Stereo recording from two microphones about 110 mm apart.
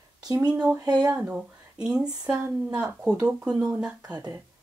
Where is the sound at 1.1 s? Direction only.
15° right (ahead or behind).